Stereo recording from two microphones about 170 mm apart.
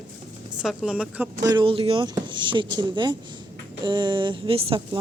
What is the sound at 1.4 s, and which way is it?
Speech, 25° right (ahead or behind).